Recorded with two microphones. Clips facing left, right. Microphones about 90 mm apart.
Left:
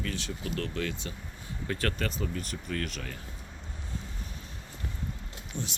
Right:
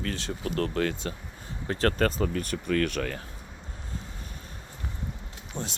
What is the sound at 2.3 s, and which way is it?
Speech, 60° right (ahead or behind).